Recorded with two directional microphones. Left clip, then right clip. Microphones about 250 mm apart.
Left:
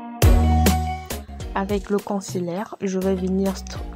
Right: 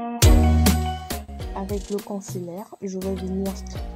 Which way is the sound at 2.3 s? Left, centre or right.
Centre.